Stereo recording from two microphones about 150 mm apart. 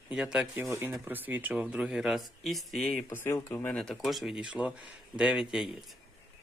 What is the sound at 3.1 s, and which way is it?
Speech, 15° left (ahead or behind).